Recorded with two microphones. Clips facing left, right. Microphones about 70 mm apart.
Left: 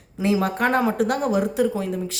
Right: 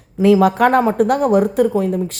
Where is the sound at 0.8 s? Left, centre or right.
Right.